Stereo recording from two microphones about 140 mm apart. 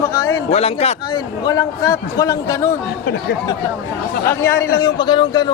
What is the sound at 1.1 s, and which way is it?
A woman's voice, 30° left (ahead or behind).